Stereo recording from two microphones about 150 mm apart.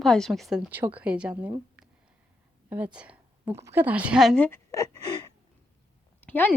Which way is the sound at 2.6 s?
10° right (ahead or behind).